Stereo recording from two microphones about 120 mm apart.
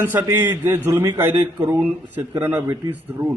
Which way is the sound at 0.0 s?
20° right (ahead or behind).